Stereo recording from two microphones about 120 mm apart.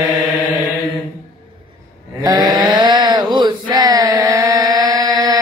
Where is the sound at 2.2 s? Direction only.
35° right (ahead or behind).